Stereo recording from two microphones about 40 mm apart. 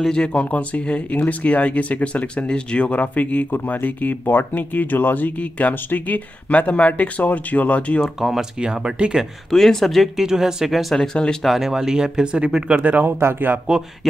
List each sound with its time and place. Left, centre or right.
0.0 s speech: left
2.4 s speech: left
3.4 s speech: left
5.4 s speech: left
8.2 s speech: centre
8.5 s speech: right
9.5 s speech: centre
10.1 s speech: centre
11.0 s speech: centre
11.4 s speech: centre
12.6 s speech: right
13.2 s speech: right